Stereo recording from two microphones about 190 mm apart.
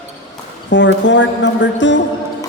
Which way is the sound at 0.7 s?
70° left (ahead or behind).